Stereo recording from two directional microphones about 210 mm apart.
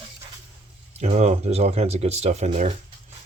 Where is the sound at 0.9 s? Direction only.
30° right (ahead or behind).